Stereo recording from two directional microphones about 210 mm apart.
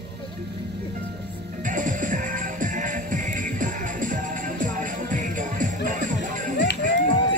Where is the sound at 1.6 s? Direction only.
40° right (ahead or behind).